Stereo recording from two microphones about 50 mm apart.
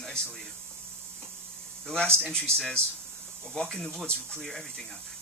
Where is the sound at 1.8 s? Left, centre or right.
Centre.